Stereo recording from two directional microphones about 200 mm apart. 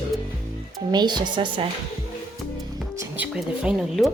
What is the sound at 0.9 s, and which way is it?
Speech, 20° right (ahead or behind).